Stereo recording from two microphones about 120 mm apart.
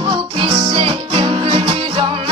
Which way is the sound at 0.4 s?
45° right (ahead or behind).